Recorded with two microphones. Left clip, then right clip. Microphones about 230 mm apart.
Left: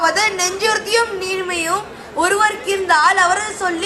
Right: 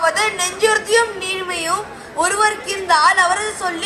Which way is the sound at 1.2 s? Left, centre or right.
Left.